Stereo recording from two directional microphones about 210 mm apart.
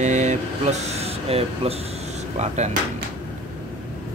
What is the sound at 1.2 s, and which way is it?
Speech, 30° right (ahead or behind).